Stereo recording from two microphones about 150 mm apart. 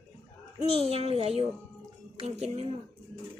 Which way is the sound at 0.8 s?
45° right (ahead or behind).